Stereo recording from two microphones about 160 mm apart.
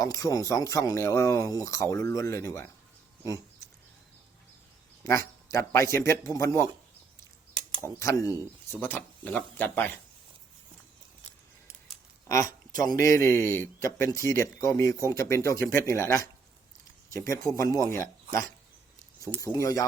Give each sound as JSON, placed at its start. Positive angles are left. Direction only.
{"t": 0.0, "sound": "speech", "side_deg": 20}
{"t": 5.0, "sound": "a man's voice", "side_deg": 20}
{"t": 7.5, "sound": "a sound", "side_deg": -30}
{"t": 7.9, "sound": "a man's voice", "side_deg": 20}
{"t": 12.3, "sound": "a man's voice", "side_deg": 20}